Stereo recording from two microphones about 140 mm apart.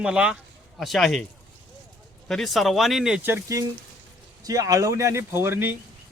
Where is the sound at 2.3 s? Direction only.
Centre (ahead or behind).